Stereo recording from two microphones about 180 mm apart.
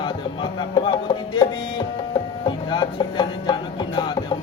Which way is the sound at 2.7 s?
25° left (ahead or behind).